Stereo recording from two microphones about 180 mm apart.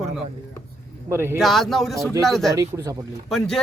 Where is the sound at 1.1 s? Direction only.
15° right (ahead or behind).